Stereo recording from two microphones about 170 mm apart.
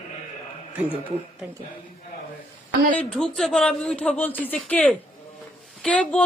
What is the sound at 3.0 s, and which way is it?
A woman's voice, 5° left (ahead or behind).